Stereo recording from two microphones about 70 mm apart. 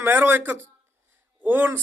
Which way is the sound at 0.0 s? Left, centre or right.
Right.